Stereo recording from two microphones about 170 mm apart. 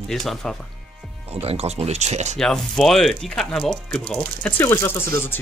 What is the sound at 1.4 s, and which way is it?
Speech, 35° right (ahead or behind).